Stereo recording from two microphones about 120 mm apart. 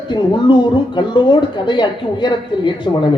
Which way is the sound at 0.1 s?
40° left (ahead or behind).